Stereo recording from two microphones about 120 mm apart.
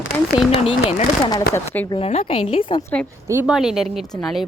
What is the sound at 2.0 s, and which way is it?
Speech, 65° left (ahead or behind).